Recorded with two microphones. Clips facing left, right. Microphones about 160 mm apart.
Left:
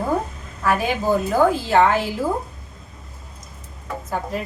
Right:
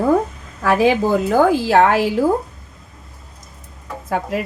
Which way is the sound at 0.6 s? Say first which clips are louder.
Right 5 dB; 90° right.